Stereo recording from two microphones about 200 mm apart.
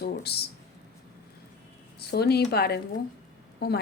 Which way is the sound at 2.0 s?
55° left (ahead or behind).